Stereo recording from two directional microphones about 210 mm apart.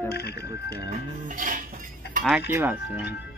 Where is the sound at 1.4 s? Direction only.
40° right (ahead or behind).